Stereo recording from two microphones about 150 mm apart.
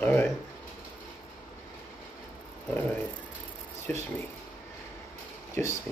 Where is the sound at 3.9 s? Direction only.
10° left (ahead or behind).